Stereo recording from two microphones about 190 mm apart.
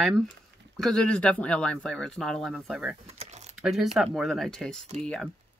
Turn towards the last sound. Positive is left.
turn(degrees=5)  # may be behind; listen again after turning